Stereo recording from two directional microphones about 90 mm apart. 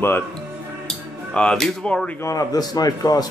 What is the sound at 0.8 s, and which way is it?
Speech, 10° left (ahead or behind).